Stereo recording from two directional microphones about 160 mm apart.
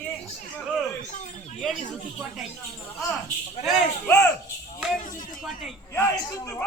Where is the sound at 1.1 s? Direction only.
50° left (ahead or behind).